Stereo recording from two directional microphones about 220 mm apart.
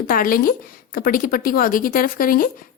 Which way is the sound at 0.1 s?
40° left (ahead or behind).